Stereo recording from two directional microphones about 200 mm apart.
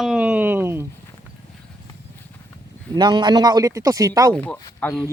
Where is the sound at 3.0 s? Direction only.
20° right (ahead or behind).